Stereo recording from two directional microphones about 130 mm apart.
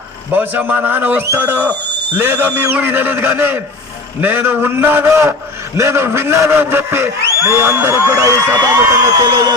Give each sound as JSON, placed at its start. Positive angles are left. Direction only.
{"t": 0.3, "sound": "a man's voice", "side_deg": -15}